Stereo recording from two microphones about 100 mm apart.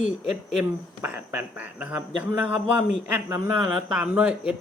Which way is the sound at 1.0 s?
15° right (ahead or behind).